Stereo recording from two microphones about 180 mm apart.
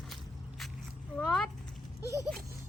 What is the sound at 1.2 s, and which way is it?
Speech, centre (ahead or behind).